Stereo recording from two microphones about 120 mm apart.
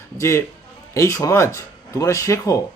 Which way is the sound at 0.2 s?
25° left (ahead or behind).